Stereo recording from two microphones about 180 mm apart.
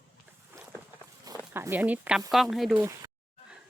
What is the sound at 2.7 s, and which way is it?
Speech, 15° right (ahead or behind).